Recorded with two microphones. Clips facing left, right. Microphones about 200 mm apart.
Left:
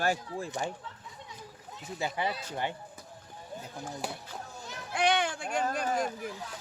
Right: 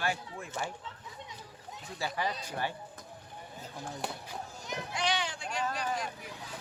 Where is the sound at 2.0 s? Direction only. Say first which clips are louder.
Left 2 dB; 20° left (ahead or behind).